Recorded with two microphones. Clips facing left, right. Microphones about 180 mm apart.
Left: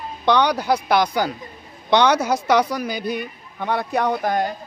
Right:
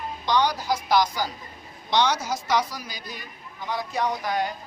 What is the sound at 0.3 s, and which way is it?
A woman's voice, 65° left (ahead or behind).